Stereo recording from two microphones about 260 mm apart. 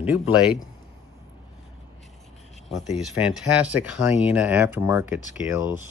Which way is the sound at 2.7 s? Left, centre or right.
Centre.